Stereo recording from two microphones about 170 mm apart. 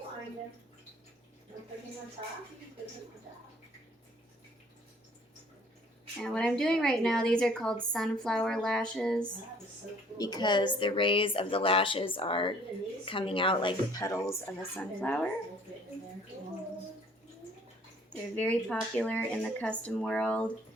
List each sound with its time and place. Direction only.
2.2 s speech: 40° right (ahead or behind)
6.1 s a woman's voice: 5° left (ahead or behind)
10.2 s a woman's voice: 25° left (ahead or behind)
18.1 s speech: 10° left (ahead or behind)